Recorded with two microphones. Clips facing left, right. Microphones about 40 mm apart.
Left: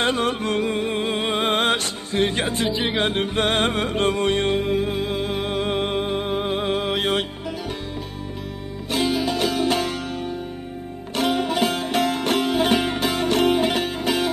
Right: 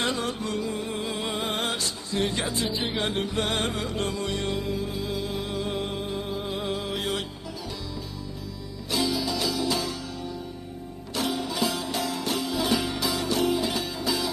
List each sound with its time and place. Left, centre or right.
0.0 s music: left
2.6 s speech: centre
3.0 s music: left
8.9 s music: left